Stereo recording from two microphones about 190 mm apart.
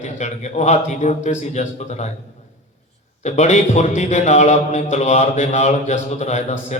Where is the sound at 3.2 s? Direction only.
35° left (ahead or behind).